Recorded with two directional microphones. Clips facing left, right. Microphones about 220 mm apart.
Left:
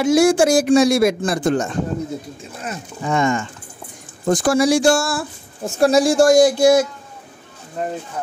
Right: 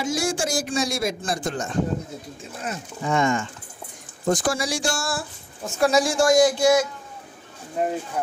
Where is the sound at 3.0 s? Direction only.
60° left (ahead or behind).